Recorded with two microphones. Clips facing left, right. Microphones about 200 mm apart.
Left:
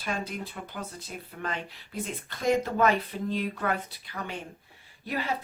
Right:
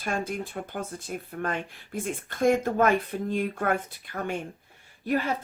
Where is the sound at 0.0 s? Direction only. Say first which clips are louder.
Right 3 dB; 50° right (ahead or behind).